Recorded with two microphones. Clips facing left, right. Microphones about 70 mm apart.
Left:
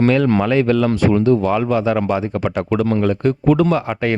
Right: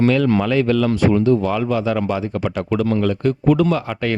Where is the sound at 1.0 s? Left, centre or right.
Left.